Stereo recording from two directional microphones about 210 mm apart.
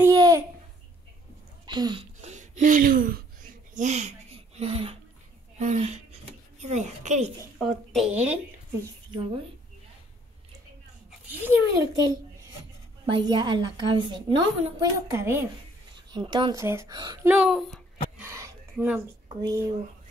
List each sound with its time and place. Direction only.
0.0 s babbling: 15° right (ahead or behind)
1.7 s speech: 20° right (ahead or behind)
2.2 s a sound: 35° right (ahead or behind)
4.6 s a woman's voice: 30° right (ahead or behind)
7.5 s speech: centre (ahead or behind)
11.1 s a child's voice: 10° right (ahead or behind)
17.3 s a sound: 5° right (ahead or behind)
19.2 s speech: 15° right (ahead or behind)